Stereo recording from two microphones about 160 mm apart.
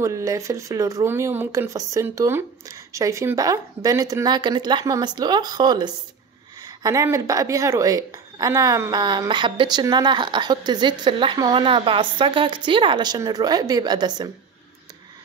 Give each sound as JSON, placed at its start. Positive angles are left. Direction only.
{"t": 0.0, "sound": "a woman's voice", "side_deg": -20}